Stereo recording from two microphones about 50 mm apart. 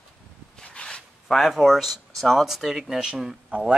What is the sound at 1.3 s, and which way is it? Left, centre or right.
Speech, centre.